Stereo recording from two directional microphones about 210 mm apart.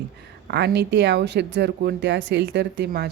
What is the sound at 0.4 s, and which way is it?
A woman's voice, 50° right (ahead or behind).